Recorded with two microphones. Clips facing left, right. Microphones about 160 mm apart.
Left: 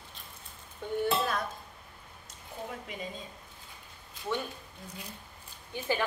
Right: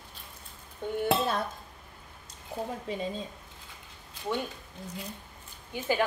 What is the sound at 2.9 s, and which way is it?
Speech, 30° right (ahead or behind).